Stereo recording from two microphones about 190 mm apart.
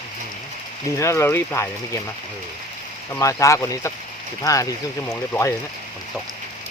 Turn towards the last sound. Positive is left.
turn(degrees=15)  # may be behind; listen again after turning